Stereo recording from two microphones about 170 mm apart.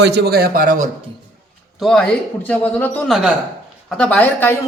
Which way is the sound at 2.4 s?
10° left (ahead or behind).